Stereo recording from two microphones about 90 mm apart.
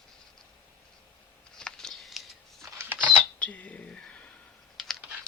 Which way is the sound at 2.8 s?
20° right (ahead or behind).